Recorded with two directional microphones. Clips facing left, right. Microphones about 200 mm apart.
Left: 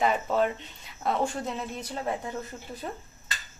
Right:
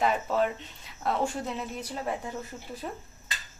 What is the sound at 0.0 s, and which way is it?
A woman's voice, centre (ahead or behind).